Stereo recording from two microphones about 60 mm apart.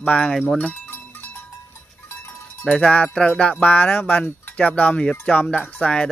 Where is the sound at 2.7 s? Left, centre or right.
Left.